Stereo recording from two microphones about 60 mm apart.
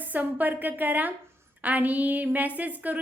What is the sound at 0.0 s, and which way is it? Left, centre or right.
A woman's voice, right.